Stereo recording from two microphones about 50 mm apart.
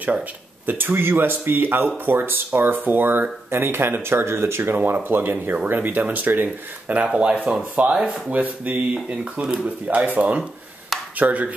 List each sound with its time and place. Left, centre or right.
0.7 s speech: right
4.7 s speech: right
5.7 s speech: right; by 8.2 s centre
8.3 s speech: right